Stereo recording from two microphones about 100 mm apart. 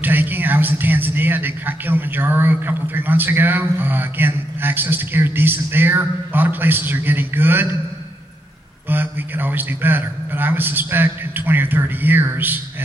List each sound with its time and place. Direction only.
0.0 s a man's voice: 20° right (ahead or behind)
8.8 s a man's voice: 20° right (ahead or behind)